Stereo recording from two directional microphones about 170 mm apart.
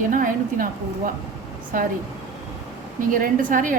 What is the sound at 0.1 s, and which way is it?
A woman's voice, 55° right (ahead or behind).